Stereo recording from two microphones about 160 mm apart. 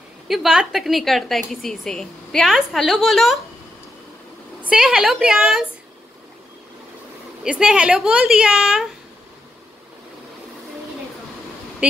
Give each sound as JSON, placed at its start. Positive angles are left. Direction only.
{"t": 0.3, "sound": "a woman's voice", "side_deg": -5}
{"t": 4.6, "sound": "a woman's voice", "side_deg": -5}
{"t": 7.4, "sound": "a woman's voice", "side_deg": -5}
{"t": 11.8, "sound": "speech", "side_deg": -5}